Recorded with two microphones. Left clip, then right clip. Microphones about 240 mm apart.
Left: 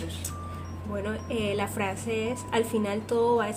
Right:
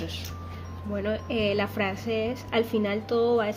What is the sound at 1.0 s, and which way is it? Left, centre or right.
Speech, centre.